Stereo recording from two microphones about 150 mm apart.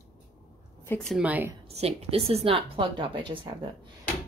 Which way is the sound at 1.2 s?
10° right (ahead or behind).